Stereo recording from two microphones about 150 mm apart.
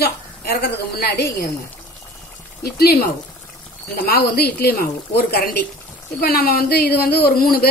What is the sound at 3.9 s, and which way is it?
Speech, 90° left.